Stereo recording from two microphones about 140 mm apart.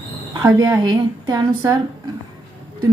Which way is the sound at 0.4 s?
20° right (ahead or behind).